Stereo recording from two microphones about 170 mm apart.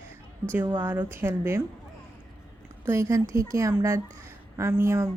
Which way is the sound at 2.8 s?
15° right (ahead or behind).